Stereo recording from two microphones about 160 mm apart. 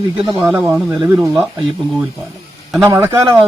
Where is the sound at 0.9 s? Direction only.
25° right (ahead or behind).